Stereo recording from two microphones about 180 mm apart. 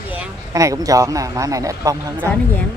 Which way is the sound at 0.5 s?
20° right (ahead or behind).